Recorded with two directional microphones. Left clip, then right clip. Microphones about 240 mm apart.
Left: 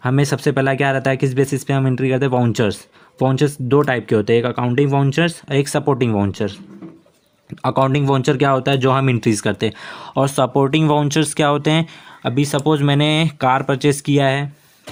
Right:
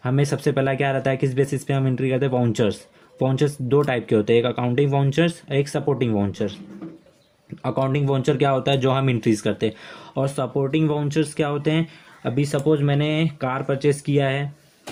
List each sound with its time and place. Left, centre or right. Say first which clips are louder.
0.0 s speech: left 4 dB; left
7.6 s speech: left 6 dB; left